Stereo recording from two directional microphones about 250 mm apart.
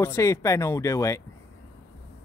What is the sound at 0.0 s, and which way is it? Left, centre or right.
Speech, centre.